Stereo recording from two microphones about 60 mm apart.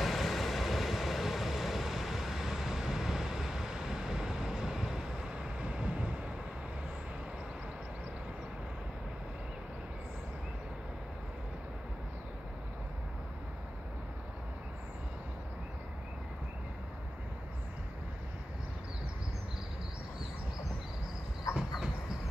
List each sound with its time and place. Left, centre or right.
0.0 s vehicle: centre
5.3 s vehicle: centre
21.5 s train: centre